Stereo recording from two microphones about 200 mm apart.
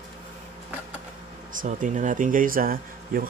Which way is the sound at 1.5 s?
40° right (ahead or behind).